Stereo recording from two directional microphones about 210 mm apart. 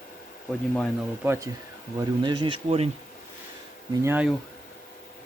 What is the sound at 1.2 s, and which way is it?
Speech, 10° right (ahead or behind).